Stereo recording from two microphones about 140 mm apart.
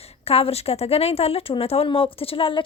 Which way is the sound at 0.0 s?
45° left (ahead or behind).